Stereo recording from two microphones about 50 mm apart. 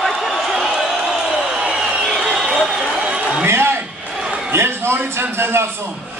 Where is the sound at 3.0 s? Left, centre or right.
Right.